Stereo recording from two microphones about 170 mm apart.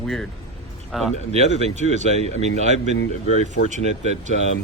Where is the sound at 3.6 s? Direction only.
65° left (ahead or behind).